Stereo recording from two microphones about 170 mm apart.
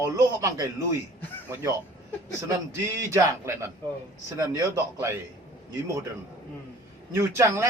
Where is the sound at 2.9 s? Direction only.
15° right (ahead or behind).